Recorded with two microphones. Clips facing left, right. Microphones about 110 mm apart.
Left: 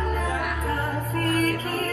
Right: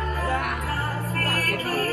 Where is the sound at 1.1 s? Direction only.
70° right (ahead or behind).